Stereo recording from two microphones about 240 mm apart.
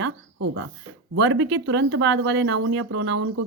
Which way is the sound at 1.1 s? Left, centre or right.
Right.